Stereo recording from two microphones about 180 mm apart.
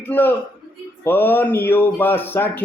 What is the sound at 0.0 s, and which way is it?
Speech, 10° left (ahead or behind).